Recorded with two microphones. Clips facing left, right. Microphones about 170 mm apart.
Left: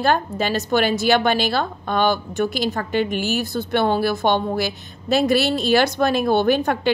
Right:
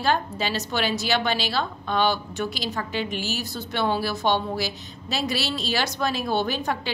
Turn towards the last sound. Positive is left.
turn(degrees=55)  # may be behind; listen again after turning